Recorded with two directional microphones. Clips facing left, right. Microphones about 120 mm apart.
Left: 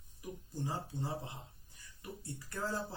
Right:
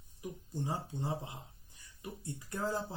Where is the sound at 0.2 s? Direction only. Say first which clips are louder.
Right 2 dB; 20° right (ahead or behind).